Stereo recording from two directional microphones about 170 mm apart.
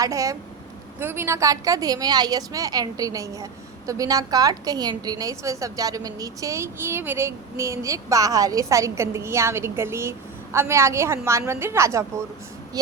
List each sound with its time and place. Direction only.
0.0 s a woman's voice: 20° right (ahead or behind)